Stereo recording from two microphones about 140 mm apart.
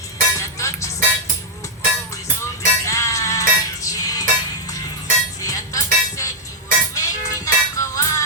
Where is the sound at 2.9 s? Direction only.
25° left (ahead or behind).